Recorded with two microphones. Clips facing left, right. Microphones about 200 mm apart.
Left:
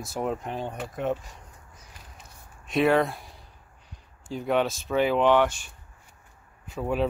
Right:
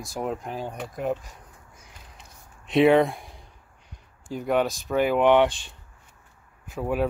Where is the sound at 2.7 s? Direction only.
25° right (ahead or behind).